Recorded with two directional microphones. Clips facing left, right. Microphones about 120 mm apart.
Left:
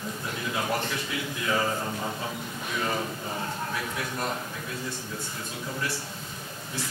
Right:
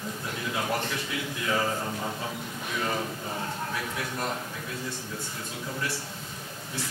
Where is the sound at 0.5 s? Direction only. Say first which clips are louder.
Left 1 dB; 25° left (ahead or behind).